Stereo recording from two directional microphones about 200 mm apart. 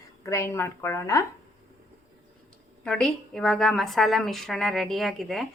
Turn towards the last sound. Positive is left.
turn(degrees=0)  # may be behind; listen again after turning